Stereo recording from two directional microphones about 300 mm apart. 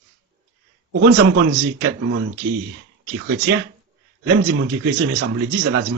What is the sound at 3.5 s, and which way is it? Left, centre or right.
Speech, right.